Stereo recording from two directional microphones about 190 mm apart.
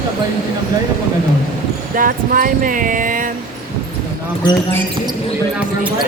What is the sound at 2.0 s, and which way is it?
Speech, 45° right (ahead or behind).